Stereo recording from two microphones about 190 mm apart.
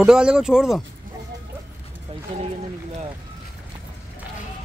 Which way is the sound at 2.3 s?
30° right (ahead or behind).